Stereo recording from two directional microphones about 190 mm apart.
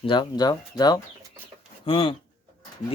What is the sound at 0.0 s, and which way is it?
Speech, 25° left (ahead or behind).